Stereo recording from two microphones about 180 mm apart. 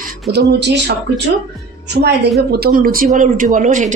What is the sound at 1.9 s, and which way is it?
Speech, 65° right (ahead or behind).